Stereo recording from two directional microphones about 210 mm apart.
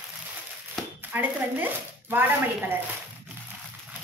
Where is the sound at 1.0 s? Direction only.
10° right (ahead or behind).